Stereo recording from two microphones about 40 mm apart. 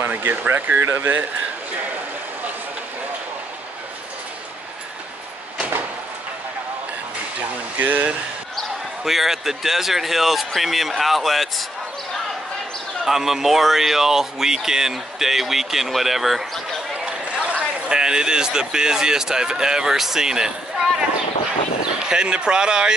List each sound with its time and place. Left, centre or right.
0.0 s speech: right
7.7 s speech: right
9.0 s speech: centre
13.0 s speech: centre
17.0 s a sound: right
17.9 s speech: centre
22.1 s speech: right